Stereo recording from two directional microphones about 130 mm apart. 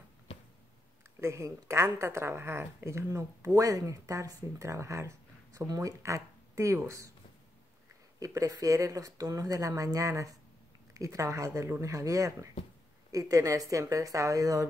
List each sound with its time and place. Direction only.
1.2 s a woman's voice: 20° right (ahead or behind)
8.2 s a woman's voice: 25° right (ahead or behind)